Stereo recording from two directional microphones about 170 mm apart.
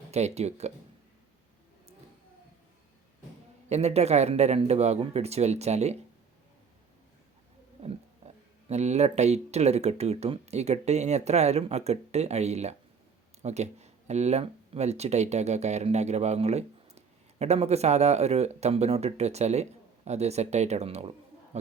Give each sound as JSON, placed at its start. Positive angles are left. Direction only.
{"t": 0.1, "sound": "speech", "side_deg": -40}
{"t": 3.7, "sound": "speech", "side_deg": -40}
{"t": 8.7, "sound": "speech", "side_deg": -40}